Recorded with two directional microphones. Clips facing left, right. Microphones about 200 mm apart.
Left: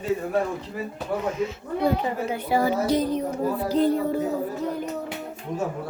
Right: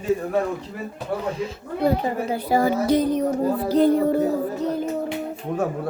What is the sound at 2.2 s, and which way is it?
Speech, 40° right (ahead or behind).